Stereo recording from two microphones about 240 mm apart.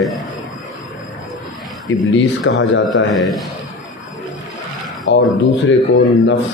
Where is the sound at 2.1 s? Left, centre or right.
Left.